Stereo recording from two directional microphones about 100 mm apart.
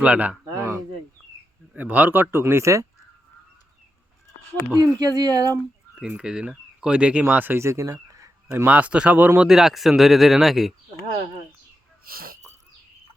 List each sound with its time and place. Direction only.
0.0 s a man's voice: 10° right (ahead or behind)
0.5 s a sound: 25° right (ahead or behind)
1.7 s a man's voice: 15° right (ahead or behind)
4.8 s speech: 40° right (ahead or behind)
6.0 s speech: 10° right (ahead or behind); by 8.3 s 35° right (ahead or behind)
8.4 s a man's voice: 20° right (ahead or behind)
9.5 s speech: 5° right (ahead or behind)